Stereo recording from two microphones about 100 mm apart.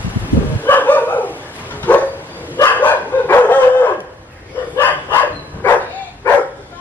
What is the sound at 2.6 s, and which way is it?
Dog, 20° left (ahead or behind).